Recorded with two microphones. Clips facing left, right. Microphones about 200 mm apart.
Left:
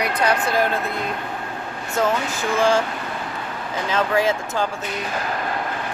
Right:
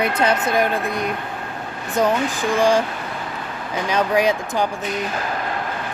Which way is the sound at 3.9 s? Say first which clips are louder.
Right 2 dB; 15° right (ahead or behind).